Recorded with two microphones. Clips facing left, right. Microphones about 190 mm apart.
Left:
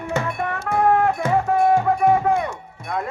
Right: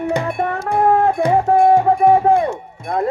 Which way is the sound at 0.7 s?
35° right (ahead or behind).